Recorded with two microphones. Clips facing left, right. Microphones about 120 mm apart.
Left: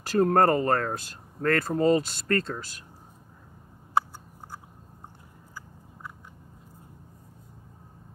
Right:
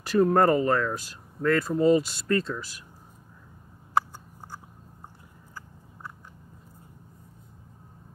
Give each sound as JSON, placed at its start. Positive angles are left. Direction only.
{"t": 0.0, "sound": "speech", "side_deg": 45}